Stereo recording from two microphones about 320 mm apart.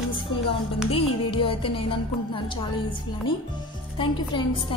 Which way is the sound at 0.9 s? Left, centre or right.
Centre.